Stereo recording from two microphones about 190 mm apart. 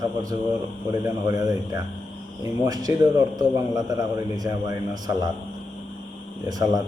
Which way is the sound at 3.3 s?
20° right (ahead or behind).